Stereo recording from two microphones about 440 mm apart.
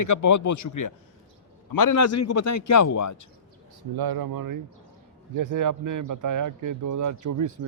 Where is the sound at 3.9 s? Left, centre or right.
Right.